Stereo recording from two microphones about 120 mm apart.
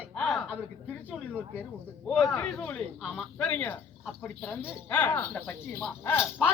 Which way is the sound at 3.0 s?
5° right (ahead or behind).